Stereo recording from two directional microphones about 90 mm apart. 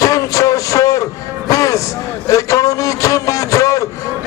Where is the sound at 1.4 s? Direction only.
35° left (ahead or behind).